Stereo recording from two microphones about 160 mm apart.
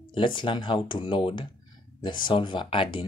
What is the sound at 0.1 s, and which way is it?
Speech, 30° left (ahead or behind).